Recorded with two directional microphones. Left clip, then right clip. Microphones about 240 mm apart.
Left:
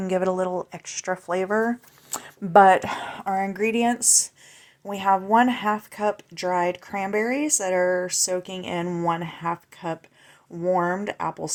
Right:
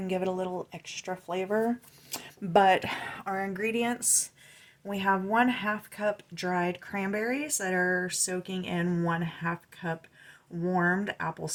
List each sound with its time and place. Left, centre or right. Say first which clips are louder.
0.0 s speech: left 8 dB; centre; by 11.5 s left